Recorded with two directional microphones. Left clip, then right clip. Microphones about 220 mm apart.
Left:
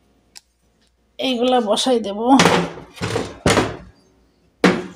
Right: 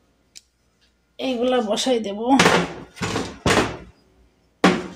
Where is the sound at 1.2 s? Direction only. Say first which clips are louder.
Left 3 dB; 20° left (ahead or behind).